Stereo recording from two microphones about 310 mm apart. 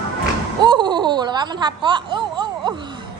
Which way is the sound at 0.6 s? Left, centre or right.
Centre.